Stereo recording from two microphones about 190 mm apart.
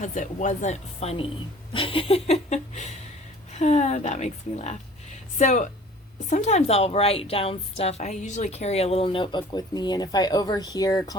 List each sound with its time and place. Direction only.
0.0 s a woman's voice: 40° left (ahead or behind); by 11.2 s 20° left (ahead or behind)